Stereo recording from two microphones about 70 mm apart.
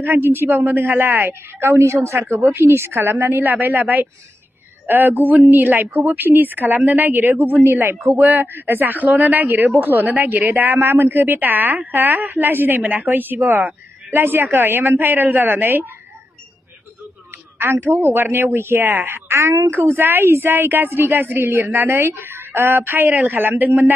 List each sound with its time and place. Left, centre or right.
0.0 s a woman's voice: right
17.6 s a woman's voice: right